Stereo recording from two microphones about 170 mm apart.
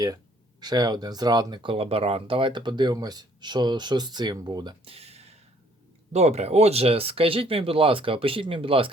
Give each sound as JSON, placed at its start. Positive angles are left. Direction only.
{"t": 0.6, "sound": "speech", "side_deg": -25}